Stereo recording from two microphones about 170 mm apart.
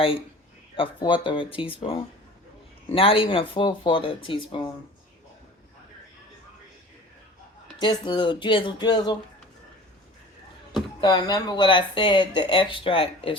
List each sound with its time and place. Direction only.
0.8 s speech: 30° left (ahead or behind)
7.8 s speech: 30° left (ahead or behind)
11.0 s speech: 25° left (ahead or behind)